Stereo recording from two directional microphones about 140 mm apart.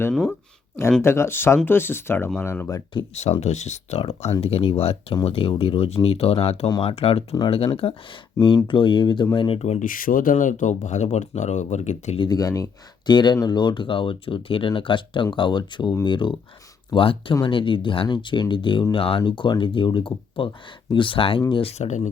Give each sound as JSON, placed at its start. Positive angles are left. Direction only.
{"t": 0.1, "sound": "speech", "side_deg": 0}
{"t": 1.0, "sound": "speech", "side_deg": 20}
{"t": 3.4, "sound": "speech", "side_deg": 55}
{"t": 9.8, "sound": "speech", "side_deg": 80}
{"t": 12.2, "sound": "speech", "side_deg": 30}